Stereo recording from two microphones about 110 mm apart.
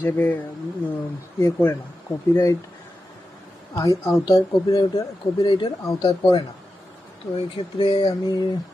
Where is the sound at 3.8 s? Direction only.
30° left (ahead or behind).